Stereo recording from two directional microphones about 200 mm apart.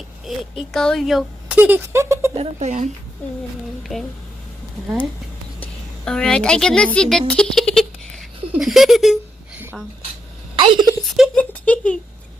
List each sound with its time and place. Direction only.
0.3 s speech: centre (ahead or behind)
2.3 s speech: 30° right (ahead or behind)
3.9 s speech: centre (ahead or behind)
6.1 s speech: 5° left (ahead or behind)
10.5 s a sound: 25° right (ahead or behind)
11.0 s a sound: centre (ahead or behind)